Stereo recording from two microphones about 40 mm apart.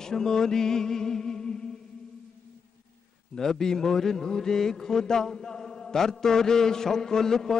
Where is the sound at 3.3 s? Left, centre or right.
Centre.